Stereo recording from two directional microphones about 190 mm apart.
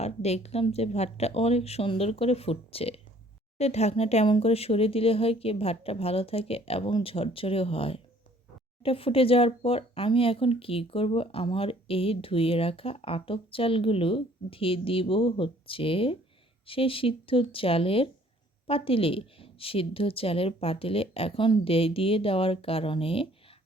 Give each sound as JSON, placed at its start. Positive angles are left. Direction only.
{"t": 0.0, "sound": "speech", "side_deg": 35}